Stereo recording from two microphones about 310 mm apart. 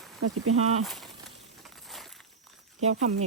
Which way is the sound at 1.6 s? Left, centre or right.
Centre.